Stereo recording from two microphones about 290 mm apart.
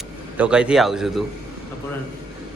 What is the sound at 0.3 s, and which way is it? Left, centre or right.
Speech, centre.